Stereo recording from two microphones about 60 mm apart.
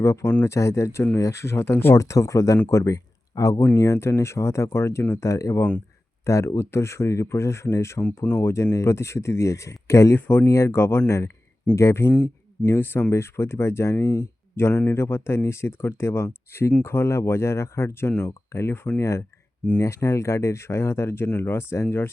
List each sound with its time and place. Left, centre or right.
0.0 s speech: left
2.0 s speech: left
3.8 s speech: left
5.1 s speech: left
10.2 s speech: left
10.4 s speech: left
11.0 s speech: left
11.7 s speech: left
14.8 s speech: left